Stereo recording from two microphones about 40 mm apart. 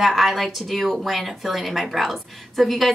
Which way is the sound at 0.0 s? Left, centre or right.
Centre.